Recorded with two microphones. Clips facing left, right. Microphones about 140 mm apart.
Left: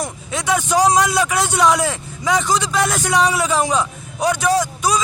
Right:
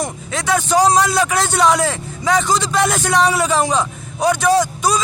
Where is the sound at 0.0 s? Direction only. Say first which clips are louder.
Right 1 dB; 15° left (ahead or behind).